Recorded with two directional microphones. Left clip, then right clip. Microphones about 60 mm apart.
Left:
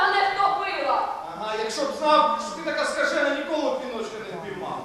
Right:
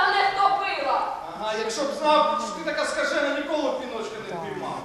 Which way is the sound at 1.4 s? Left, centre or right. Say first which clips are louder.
Even; centre.